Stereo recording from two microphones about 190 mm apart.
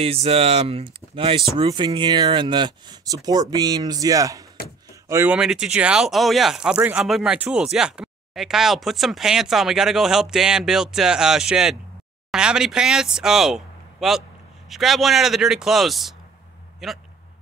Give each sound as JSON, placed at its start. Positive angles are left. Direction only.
{"t": 0.0, "sound": "speech", "side_deg": -30}